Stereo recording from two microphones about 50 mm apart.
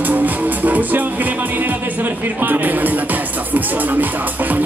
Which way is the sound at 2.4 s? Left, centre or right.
Right.